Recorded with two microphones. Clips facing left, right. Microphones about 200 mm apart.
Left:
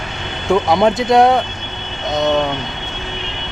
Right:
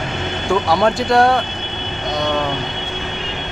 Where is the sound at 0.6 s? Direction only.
20° left (ahead or behind).